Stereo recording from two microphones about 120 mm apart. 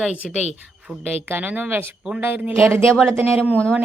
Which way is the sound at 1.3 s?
15° right (ahead or behind).